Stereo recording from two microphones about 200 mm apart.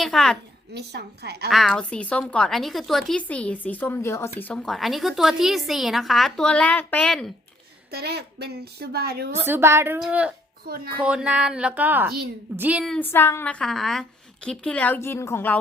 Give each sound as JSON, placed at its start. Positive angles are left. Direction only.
{"t": 0.0, "sound": "a woman's voice", "side_deg": 0}
{"t": 0.7, "sound": "a woman's voice", "side_deg": -55}
{"t": 1.5, "sound": "a woman's voice", "side_deg": 0}
{"t": 7.9, "sound": "speech", "side_deg": -50}
{"t": 9.3, "sound": "a woman's voice", "side_deg": -10}